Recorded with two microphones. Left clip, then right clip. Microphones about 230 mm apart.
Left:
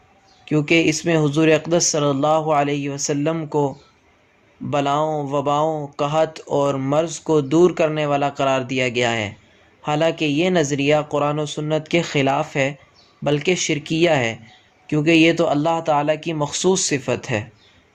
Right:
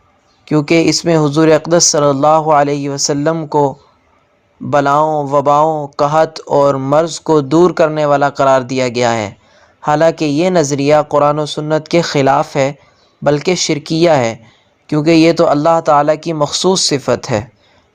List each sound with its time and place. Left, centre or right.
0.4 s speech: right